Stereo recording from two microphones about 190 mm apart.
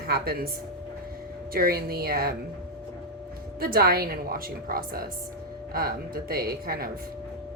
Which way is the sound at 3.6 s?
50° right (ahead or behind).